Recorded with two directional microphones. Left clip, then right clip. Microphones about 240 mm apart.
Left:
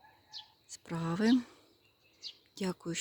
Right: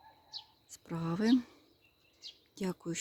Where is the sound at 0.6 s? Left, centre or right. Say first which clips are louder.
Left 2 dB; centre.